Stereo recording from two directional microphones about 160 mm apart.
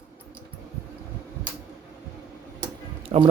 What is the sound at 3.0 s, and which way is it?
Music, 35° right (ahead or behind).